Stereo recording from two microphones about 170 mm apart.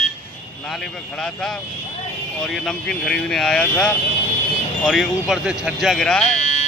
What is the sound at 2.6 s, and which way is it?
Speech, 5° left (ahead or behind).